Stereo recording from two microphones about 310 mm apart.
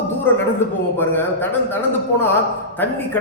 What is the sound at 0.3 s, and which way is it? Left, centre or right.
Speech, centre.